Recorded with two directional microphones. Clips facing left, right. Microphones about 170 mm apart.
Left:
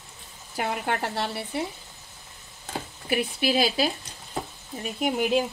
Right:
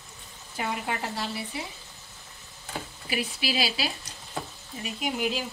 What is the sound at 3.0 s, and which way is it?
Speech, 55° left (ahead or behind).